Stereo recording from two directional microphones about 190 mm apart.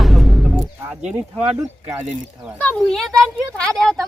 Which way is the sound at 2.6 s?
5° left (ahead or behind).